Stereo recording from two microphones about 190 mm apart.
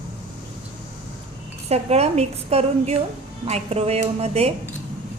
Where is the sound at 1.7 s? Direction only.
35° right (ahead or behind).